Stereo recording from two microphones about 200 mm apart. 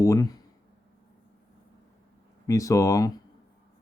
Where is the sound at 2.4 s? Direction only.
15° left (ahead or behind).